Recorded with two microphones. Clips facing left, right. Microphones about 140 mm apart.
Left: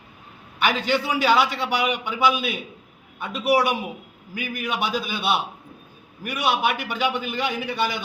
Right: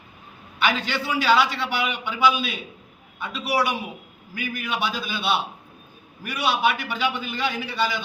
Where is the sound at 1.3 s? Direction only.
50° left (ahead or behind).